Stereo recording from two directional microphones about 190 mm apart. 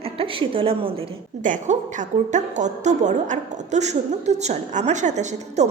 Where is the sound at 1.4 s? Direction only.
40° right (ahead or behind).